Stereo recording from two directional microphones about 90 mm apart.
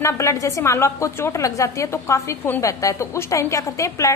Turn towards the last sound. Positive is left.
turn(degrees=35)  # may be behind; listen again after turning